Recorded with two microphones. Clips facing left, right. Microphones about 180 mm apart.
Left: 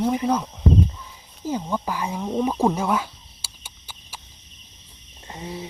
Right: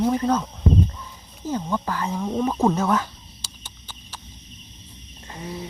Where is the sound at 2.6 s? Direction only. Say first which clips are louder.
Right 1 dB; 10° left (ahead or behind).